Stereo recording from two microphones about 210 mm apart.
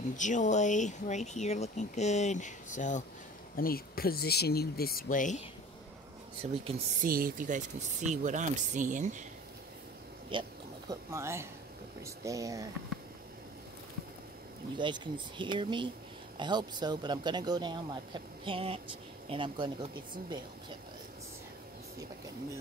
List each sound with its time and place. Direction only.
0.1 s speech: 35° left (ahead or behind)
6.4 s speech: 30° right (ahead or behind)
7.1 s speech: 40° right (ahead or behind)
10.3 s speech: 25° right (ahead or behind)
14.8 s speech: 20° right (ahead or behind)